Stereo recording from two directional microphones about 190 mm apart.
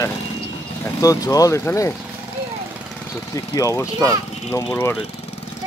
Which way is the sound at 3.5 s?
15° left (ahead or behind).